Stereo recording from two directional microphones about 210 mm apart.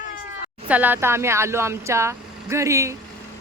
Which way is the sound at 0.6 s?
5° right (ahead or behind).